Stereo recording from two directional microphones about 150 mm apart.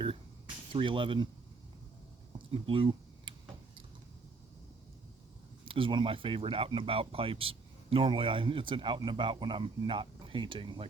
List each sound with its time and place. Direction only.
0.7 s speech: 35° right (ahead or behind)
2.5 s a sound: 35° right (ahead or behind)
5.6 s speech: 35° right (ahead or behind)